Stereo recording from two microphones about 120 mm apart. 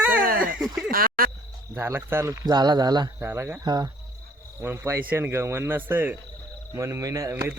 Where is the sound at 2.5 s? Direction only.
35° right (ahead or behind).